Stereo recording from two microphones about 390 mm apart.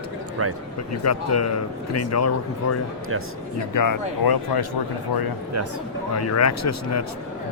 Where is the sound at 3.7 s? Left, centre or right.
Left.